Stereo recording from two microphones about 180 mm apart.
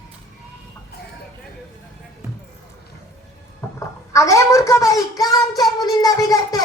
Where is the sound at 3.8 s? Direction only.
15° left (ahead or behind).